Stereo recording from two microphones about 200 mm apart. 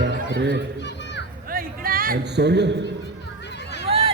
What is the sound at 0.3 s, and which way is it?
Speech, 60° right (ahead or behind).